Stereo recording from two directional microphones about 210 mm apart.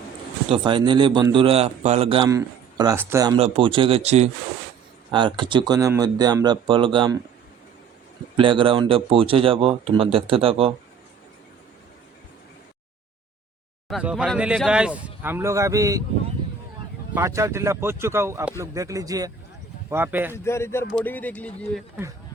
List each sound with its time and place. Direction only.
0.4 s a man's voice: 25° right (ahead or behind)
2.2 s speech: 15° right (ahead or behind)
3.3 s a man's voice: 25° right (ahead or behind)
8.4 s a man's voice: 25° right (ahead or behind)
13.8 s speech: 5° right (ahead or behind)
17.2 s speech: 15° right (ahead or behind)
20.3 s a man's voice: 15° left (ahead or behind)